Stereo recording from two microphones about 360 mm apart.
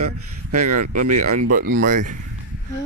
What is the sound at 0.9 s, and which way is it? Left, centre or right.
Speech, right.